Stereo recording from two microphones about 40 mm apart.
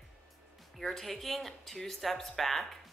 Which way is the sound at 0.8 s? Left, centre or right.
Centre.